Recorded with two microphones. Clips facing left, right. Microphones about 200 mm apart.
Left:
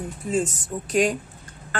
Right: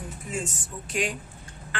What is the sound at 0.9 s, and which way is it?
Speech, 40° left (ahead or behind).